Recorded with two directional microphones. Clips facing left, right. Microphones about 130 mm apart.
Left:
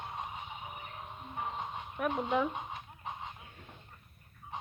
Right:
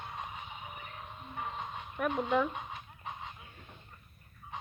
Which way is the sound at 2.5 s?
25° left (ahead or behind).